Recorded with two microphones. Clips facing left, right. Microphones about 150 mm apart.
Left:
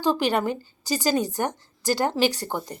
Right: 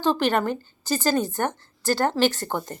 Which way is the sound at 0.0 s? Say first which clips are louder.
Right 1 dB; 10° left (ahead or behind).